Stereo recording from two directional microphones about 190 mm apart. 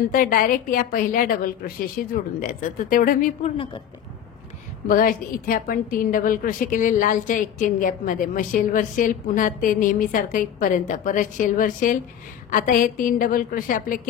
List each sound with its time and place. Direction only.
0.1 s a woman's voice: 45° left (ahead or behind)
4.8 s a woman's voice: 45° left (ahead or behind)